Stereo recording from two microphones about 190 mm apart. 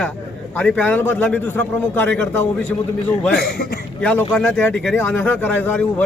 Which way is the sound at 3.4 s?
55° left (ahead or behind).